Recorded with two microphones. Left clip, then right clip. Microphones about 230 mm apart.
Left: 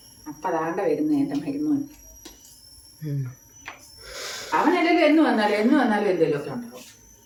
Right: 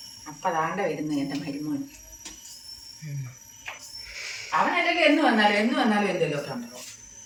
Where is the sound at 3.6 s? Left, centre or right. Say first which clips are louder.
Right 2 dB; left.